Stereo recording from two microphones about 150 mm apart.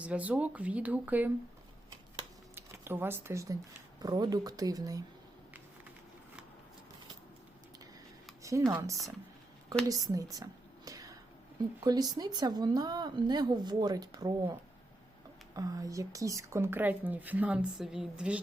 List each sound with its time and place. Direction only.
0.0 s speech: 10° right (ahead or behind)
2.6 s speech: 15° right (ahead or behind)
8.4 s a sound: 20° right (ahead or behind)
9.9 s a sound: 25° right (ahead or behind)
11.8 s speech: 25° right (ahead or behind)
15.5 s speech: 25° right (ahead or behind); by 18.3 s 5° right (ahead or behind)